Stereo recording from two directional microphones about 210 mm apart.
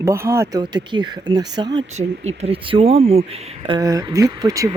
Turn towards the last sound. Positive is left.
turn(degrees=-15)  # may be behind; listen again after turning